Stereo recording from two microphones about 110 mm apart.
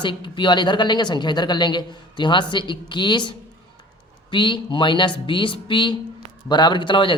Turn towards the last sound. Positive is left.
turn(degrees=50)  # may be behind; listen again after turning